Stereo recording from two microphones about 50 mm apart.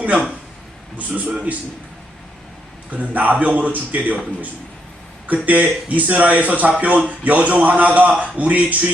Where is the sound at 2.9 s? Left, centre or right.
Right.